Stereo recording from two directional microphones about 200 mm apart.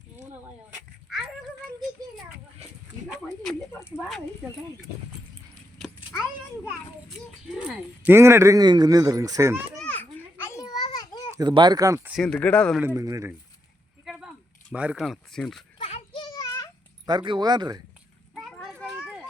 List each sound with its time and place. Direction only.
3.4 s a sound: 10° left (ahead or behind)
7.5 s speech: 5° right (ahead or behind)
9.7 s children playing: 10° left (ahead or behind)
11.3 s speech: 20° right (ahead or behind)
12.1 s speech: 5° left (ahead or behind)
12.8 s speech: 15° right (ahead or behind)
14.0 s a sound: centre (ahead or behind)
14.7 s speech: 5° right (ahead or behind)
15.8 s children playing: 30° left (ahead or behind)
17.1 s speech: 20° right (ahead or behind)
18.3 s children playing: centre (ahead or behind)